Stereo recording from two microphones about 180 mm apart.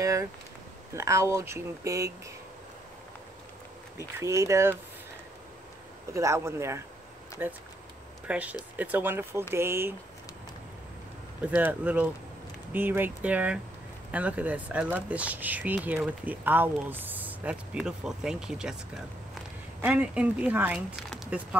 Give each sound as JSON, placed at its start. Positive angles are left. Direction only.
{"t": 0.0, "sound": "speech", "side_deg": -15}
{"t": 4.2, "sound": "speech", "side_deg": -15}
{"t": 6.1, "sound": "speech", "side_deg": -15}
{"t": 11.4, "sound": "speech", "side_deg": -10}
{"t": 19.8, "sound": "speech", "side_deg": -5}
{"t": 21.1, "sound": "a sound", "side_deg": -5}